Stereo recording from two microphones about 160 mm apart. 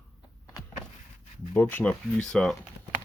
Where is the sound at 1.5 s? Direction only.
10° left (ahead or behind).